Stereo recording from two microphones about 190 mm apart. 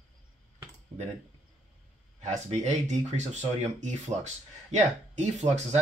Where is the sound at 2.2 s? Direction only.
40° right (ahead or behind).